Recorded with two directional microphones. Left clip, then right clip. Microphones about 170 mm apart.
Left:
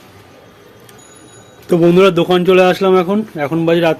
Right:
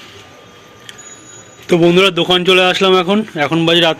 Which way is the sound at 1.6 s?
Centre (ahead or behind).